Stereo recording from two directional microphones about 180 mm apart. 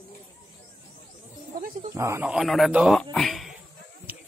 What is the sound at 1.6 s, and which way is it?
Wild animals, 50° right (ahead or behind).